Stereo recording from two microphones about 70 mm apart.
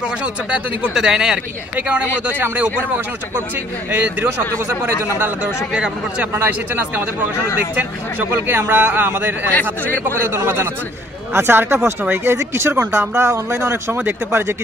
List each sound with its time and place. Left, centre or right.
0.2 s a man's voice: centre
3.9 s a man's voice: right
5.7 s speech: centre
6.4 s a man's voice: right